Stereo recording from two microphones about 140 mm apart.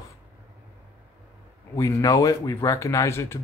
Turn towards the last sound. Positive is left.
turn(degrees=20)  # may be behind; listen again after turning